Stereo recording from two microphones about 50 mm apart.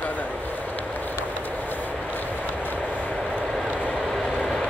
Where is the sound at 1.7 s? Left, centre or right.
Left.